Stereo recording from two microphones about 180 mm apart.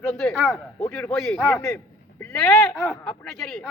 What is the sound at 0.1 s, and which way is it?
A man's voice, 5° left (ahead or behind).